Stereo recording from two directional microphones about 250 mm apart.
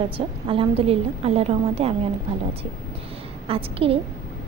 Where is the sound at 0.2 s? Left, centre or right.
Right.